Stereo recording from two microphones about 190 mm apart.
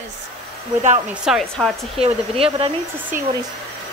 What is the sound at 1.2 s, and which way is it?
Speech, centre (ahead or behind).